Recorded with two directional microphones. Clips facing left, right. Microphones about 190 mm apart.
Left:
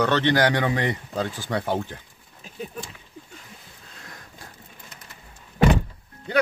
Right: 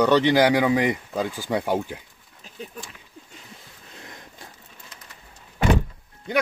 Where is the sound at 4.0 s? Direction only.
20° right (ahead or behind).